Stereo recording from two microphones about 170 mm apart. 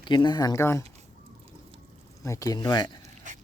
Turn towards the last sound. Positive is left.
turn(degrees=-45)  # may be behind; listen again after turning